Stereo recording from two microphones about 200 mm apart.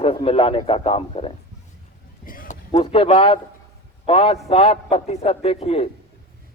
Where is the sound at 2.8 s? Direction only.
25° left (ahead or behind).